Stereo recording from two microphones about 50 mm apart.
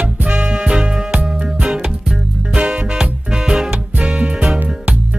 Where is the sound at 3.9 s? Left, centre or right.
Right.